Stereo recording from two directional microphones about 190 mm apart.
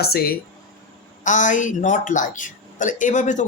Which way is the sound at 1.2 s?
40° left (ahead or behind).